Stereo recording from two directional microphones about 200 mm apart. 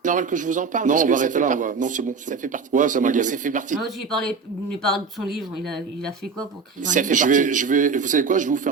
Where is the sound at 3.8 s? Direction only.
Centre (ahead or behind).